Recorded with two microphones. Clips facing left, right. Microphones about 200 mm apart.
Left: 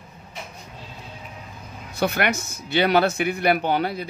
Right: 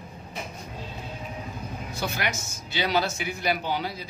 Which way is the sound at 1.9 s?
60° left (ahead or behind).